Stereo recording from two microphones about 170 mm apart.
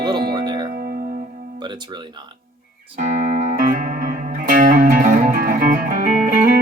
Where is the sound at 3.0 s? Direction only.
50° right (ahead or behind).